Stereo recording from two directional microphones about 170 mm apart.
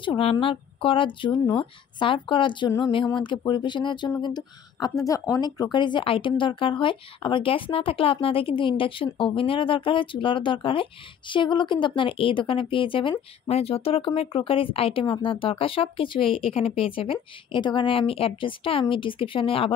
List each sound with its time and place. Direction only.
0.0 s speech: 35° left (ahead or behind)